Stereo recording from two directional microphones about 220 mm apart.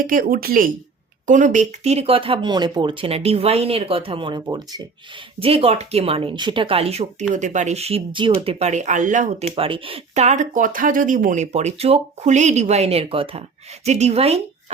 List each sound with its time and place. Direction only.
0.0 s speech: 40° right (ahead or behind)